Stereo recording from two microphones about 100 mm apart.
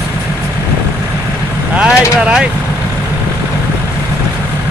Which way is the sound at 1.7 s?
10° right (ahead or behind).